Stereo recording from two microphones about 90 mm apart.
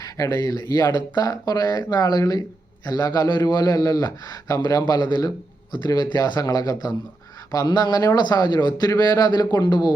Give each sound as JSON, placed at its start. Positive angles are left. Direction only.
{"t": 0.0, "sound": "a man's voice", "side_deg": 45}